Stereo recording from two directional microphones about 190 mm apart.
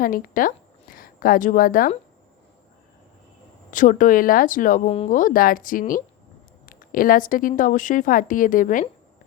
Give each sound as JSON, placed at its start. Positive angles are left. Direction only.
{"t": 0.0, "sound": "a woman's voice", "side_deg": 45}
{"t": 3.7, "sound": "a woman's voice", "side_deg": 45}